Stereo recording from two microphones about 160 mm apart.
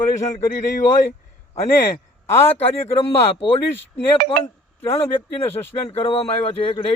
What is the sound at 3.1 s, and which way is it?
Speech, 35° left (ahead or behind).